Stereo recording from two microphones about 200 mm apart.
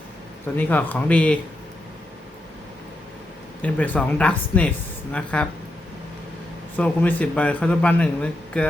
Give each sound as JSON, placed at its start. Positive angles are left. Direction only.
{"t": 0.4, "sound": "speech", "side_deg": 10}
{"t": 3.6, "sound": "speech", "side_deg": 5}
{"t": 6.7, "sound": "speech", "side_deg": 5}